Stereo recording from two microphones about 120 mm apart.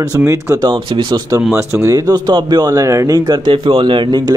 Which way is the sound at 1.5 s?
25° right (ahead or behind).